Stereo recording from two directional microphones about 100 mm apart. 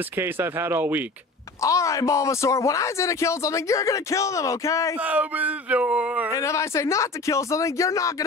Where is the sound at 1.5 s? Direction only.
30° left (ahead or behind).